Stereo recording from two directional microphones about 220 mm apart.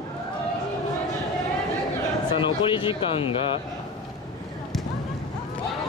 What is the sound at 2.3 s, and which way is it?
Speech, 20° left (ahead or behind).